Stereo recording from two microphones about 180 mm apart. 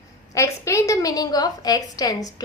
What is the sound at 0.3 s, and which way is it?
A woman's voice, 15° left (ahead or behind).